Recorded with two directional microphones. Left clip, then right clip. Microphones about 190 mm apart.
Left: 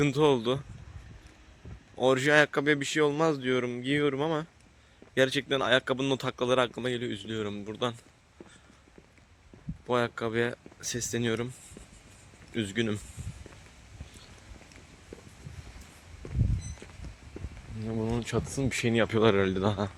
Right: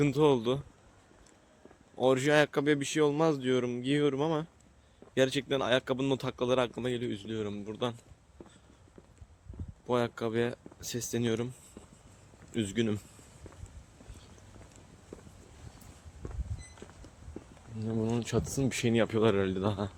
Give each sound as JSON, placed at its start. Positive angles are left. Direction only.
{"t": 0.0, "sound": "speech", "side_deg": -10}
{"t": 2.0, "sound": "a man's voice", "side_deg": -10}
{"t": 9.8, "sound": "speech", "side_deg": -10}
{"t": 12.5, "sound": "speech", "side_deg": -15}
{"t": 17.7, "sound": "speech", "side_deg": -20}
{"t": 19.2, "sound": "speech", "side_deg": 20}